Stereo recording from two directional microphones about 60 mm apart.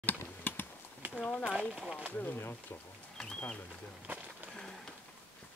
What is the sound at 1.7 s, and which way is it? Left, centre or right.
Speech, centre.